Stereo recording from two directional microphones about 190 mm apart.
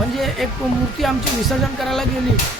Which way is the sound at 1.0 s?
Centre (ahead or behind).